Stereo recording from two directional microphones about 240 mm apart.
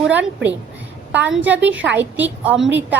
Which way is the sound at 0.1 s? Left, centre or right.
Centre.